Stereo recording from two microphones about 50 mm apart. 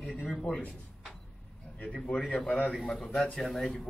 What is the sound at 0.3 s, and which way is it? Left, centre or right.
Speech, left.